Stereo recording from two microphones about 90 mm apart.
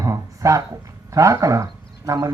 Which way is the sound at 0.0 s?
35° right (ahead or behind).